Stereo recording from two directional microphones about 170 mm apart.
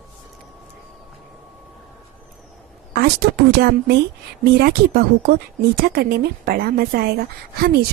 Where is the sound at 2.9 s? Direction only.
65° right (ahead or behind).